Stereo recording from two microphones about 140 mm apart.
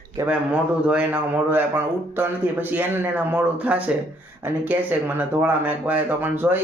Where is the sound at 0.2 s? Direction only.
20° right (ahead or behind).